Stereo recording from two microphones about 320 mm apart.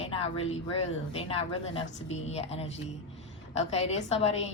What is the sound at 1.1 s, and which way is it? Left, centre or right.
A woman's voice, centre.